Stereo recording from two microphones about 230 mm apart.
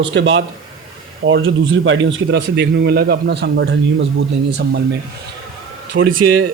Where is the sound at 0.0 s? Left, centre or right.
Right.